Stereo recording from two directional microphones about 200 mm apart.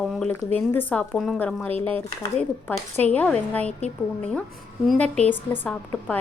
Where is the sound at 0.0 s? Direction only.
Centre (ahead or behind).